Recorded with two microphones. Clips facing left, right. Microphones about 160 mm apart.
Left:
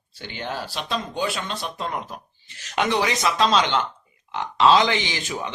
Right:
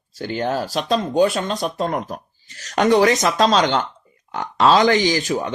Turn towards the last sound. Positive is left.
turn(degrees=-40)  # may be behind; listen again after turning